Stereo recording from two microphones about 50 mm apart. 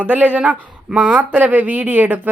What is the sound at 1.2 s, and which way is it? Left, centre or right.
Speech, right.